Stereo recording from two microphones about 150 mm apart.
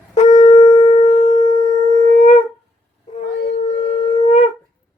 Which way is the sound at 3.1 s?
50° left (ahead or behind).